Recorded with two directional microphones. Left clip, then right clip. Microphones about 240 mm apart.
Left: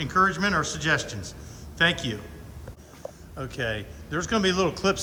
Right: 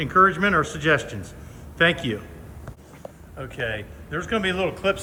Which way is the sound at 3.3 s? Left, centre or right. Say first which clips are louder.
Right 2 dB; centre.